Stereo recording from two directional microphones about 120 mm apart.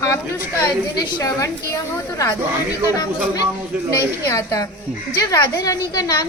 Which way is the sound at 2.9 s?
30° left (ahead or behind).